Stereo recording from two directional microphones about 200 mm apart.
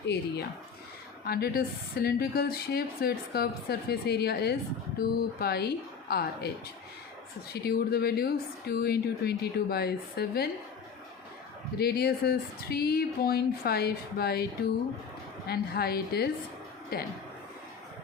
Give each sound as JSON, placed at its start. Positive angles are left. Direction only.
{"t": 0.0, "sound": "speech", "side_deg": 55}
{"t": 7.5, "sound": "speech", "side_deg": 50}
{"t": 11.8, "sound": "speech", "side_deg": 50}
{"t": 15.4, "sound": "speech", "side_deg": 50}